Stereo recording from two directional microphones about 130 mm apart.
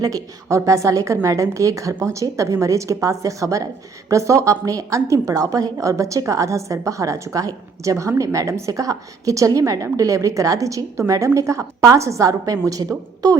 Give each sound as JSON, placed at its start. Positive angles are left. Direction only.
{"t": 0.0, "sound": "a woman's voice", "side_deg": -25}